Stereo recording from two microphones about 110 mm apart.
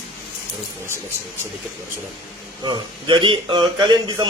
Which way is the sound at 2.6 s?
45° right (ahead or behind).